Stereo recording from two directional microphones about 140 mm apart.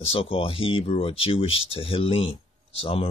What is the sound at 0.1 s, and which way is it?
Speech, 40° left (ahead or behind).